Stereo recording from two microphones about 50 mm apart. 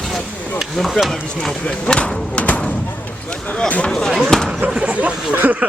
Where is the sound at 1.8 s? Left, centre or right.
Centre.